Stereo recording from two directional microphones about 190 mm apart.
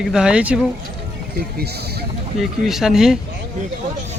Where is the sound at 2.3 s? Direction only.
Centre (ahead or behind).